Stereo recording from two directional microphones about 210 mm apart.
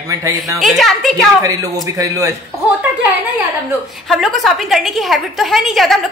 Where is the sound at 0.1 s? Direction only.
15° right (ahead or behind).